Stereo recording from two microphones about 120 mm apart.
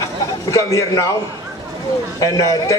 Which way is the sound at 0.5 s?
25° left (ahead or behind).